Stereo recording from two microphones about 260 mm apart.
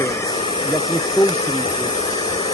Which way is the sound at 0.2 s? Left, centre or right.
Centre.